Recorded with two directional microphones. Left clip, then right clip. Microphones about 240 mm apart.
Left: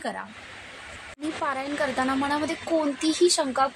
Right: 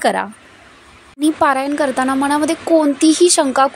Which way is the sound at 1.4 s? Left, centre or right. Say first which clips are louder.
Right 11 dB; right.